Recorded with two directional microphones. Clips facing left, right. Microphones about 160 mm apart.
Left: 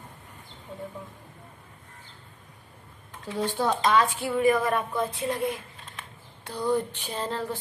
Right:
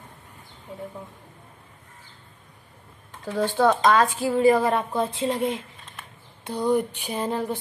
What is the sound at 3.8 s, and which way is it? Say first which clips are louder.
Speech: right 3 dB; 40° right (ahead or behind).